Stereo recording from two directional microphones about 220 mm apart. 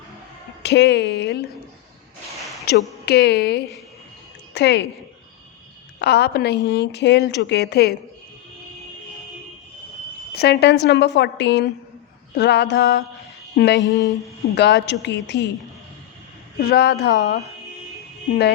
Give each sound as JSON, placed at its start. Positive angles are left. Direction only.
{"t": 0.6, "sound": "a woman's voice", "side_deg": 50}
{"t": 2.7, "sound": "a woman's voice", "side_deg": 45}
{"t": 6.0, "sound": "a woman's voice", "side_deg": 50}
{"t": 10.3, "sound": "a woman's voice", "side_deg": 50}
{"t": 13.9, "sound": "speech", "side_deg": 15}
{"t": 14.5, "sound": "a woman's voice", "side_deg": 50}
{"t": 16.6, "sound": "a woman's voice", "side_deg": 45}